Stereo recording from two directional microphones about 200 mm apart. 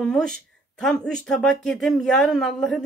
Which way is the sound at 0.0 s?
5° left (ahead or behind).